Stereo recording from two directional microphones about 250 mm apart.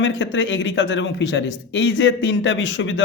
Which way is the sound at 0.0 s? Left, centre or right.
Left.